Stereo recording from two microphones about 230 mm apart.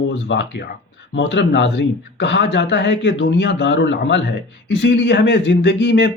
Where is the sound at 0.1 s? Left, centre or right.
Left.